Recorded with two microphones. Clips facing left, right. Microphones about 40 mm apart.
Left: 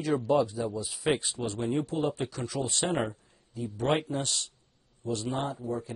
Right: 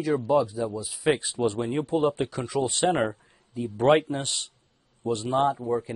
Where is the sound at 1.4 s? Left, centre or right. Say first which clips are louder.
Right 4 dB; centre.